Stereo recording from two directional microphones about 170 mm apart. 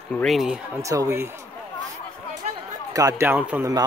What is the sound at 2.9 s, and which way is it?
Speech, 20° right (ahead or behind).